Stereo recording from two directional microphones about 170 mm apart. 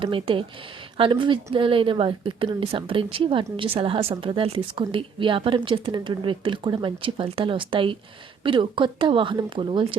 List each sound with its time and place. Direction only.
0.0 s a woman's voice: 30° right (ahead or behind)